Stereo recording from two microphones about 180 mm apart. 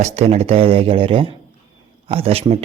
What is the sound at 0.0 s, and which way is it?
Speech, 35° right (ahead or behind).